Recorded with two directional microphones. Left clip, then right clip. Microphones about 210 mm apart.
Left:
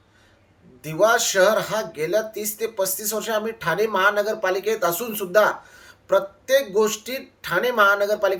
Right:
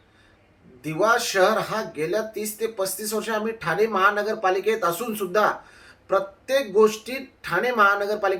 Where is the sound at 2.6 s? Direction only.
25° left (ahead or behind).